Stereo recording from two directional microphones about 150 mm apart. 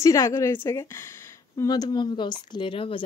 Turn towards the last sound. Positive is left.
turn(degrees=35)  # may be behind; listen again after turning